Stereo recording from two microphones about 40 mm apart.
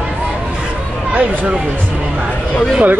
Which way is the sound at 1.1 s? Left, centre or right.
Right.